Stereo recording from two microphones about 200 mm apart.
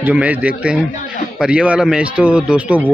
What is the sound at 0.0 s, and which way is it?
A man's voice, 5° right (ahead or behind).